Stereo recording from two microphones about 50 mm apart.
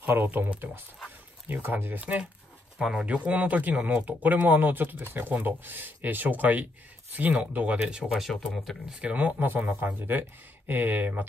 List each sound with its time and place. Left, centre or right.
0.0 s speech: right
1.5 s speech: right
2.0 s speech: right
7.8 s speech: centre
8.1 s speech: centre
8.8 s speech: right